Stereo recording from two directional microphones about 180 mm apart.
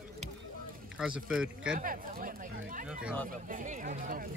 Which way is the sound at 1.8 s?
50° right (ahead or behind).